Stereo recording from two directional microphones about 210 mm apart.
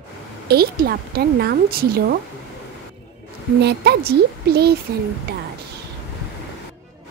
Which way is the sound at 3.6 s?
50° right (ahead or behind).